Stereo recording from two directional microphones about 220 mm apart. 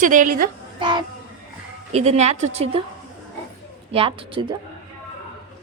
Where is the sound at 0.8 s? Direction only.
20° right (ahead or behind).